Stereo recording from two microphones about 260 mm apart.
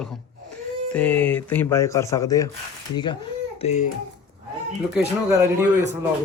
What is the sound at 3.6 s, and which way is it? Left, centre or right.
Speech, left.